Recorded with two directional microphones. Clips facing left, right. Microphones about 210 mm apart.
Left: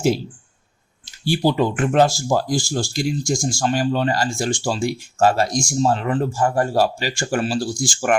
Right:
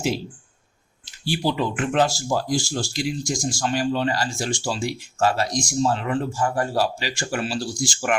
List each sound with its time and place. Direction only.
1.3 s speech: 45° left (ahead or behind)